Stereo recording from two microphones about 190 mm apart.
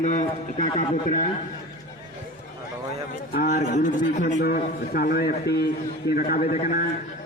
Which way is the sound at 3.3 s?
45° left (ahead or behind).